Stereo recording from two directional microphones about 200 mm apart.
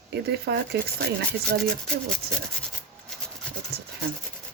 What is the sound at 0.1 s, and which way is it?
Speech, 55° right (ahead or behind).